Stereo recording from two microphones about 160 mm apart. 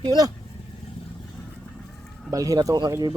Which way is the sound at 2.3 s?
20° right (ahead or behind).